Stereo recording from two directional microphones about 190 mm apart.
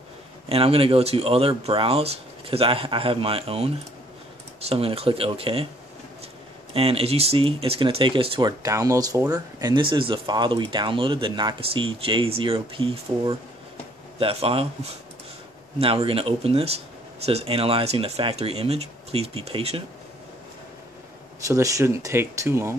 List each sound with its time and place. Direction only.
0.5 s speech: 30° right (ahead or behind)
6.7 s speech: 30° right (ahead or behind)
15.8 s speech: 30° right (ahead or behind)
21.5 s speech: 15° right (ahead or behind)